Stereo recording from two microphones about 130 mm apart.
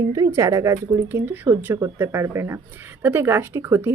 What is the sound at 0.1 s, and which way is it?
Speech, 25° right (ahead or behind).